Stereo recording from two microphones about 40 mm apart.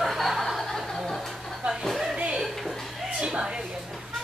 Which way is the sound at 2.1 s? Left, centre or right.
Right.